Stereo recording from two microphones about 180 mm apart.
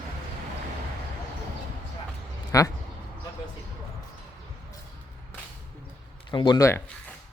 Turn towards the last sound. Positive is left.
turn(degrees=20)  # may be behind; listen again after turning